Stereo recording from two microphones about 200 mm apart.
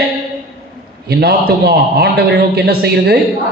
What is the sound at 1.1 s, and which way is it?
A man's voice, 50° right (ahead or behind).